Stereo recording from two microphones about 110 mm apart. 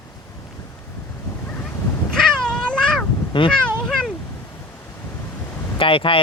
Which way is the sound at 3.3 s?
50° left (ahead or behind).